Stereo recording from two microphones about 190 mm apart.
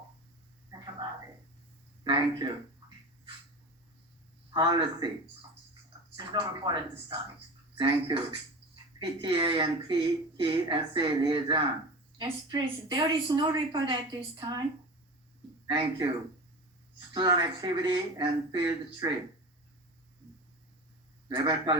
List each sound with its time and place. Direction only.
1.0 s a sound: 20° right (ahead or behind)
2.0 s speech: 25° right (ahead or behind)
4.5 s speech: 25° right (ahead or behind)
15.6 s speech: 25° right (ahead or behind)
17.2 s speech: 20° right (ahead or behind)
21.2 s speech: 25° right (ahead or behind)